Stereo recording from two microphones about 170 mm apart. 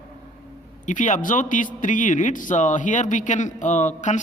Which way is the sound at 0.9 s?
45° left (ahead or behind).